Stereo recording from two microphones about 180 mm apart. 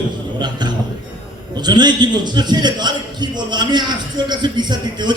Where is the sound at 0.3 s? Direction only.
25° right (ahead or behind).